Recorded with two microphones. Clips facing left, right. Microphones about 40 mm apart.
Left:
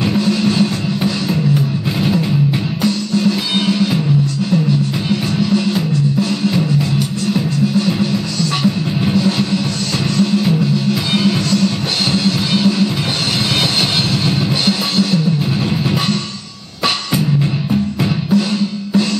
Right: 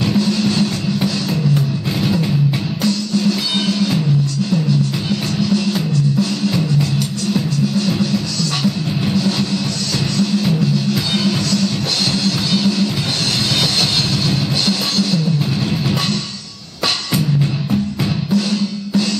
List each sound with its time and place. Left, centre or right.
0.0 s music: centre
2.8 s music: centre
5.4 s music: centre
7.3 s music: centre
14.7 s drum kit: centre
18.3 s music: centre